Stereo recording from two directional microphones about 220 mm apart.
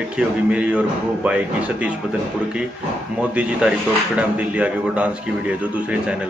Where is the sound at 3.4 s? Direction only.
5° right (ahead or behind).